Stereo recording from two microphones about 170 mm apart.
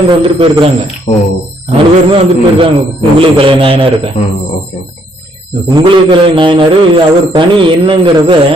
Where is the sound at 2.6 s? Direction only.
30° right (ahead or behind).